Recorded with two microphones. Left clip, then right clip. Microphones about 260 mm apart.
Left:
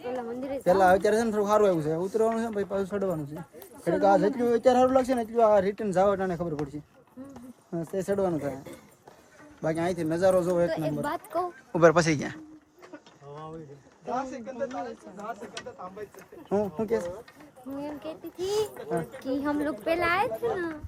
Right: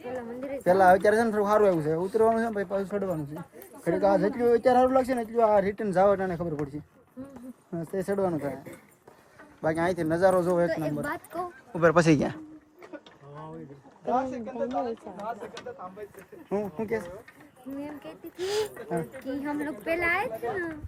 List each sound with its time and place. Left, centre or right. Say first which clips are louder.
0.0 s a sound: left 2 dB; centre
0.6 s speech: right 2 dB; centre
11.3 s speech: left 6 dB; centre
11.9 s speech: right 3 dB; centre
14.1 s speech: right 4 dB; centre
16.5 s speech: left 3 dB; centre
19.2 s speech: left 3 dB; centre